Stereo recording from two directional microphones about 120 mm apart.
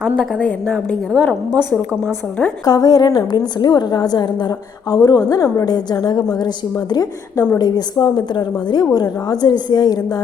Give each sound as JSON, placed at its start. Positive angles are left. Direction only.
{"t": 0.3, "sound": "a woman's voice", "side_deg": 10}
{"t": 2.6, "sound": "a woman's voice", "side_deg": 35}